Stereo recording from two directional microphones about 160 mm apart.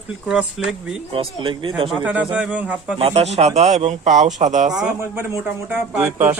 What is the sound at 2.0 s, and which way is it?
Speech, 10° right (ahead or behind).